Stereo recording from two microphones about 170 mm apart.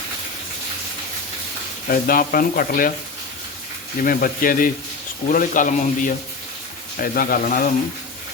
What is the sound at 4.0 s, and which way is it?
A man's voice, 55° left (ahead or behind).